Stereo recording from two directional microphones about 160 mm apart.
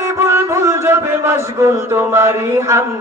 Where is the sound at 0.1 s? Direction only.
15° right (ahead or behind).